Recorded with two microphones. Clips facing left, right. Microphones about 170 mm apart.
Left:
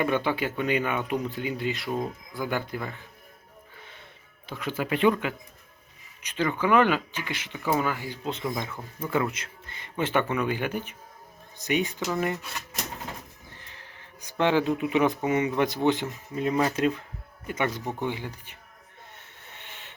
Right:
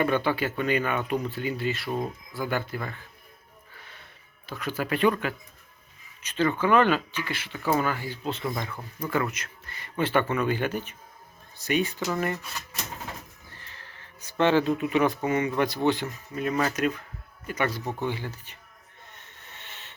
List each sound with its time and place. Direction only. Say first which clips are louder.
0.0 s speech: right 1 dB; 15° left (ahead or behind)
4.4 s speech: even; 20° left (ahead or behind)
13.6 s speech: even; 15° left (ahead or behind)
19.1 s a sound: left 1 dB; 10° left (ahead or behind)